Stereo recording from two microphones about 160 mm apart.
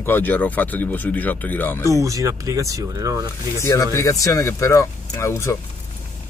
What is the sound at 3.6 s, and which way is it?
Speech, 20° left (ahead or behind).